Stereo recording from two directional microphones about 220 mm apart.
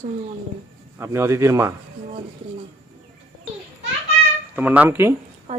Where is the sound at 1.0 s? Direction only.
10° right (ahead or behind).